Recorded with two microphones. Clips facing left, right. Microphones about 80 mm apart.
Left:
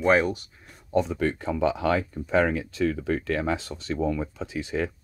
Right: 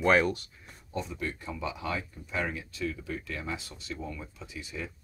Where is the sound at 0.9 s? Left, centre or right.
Left.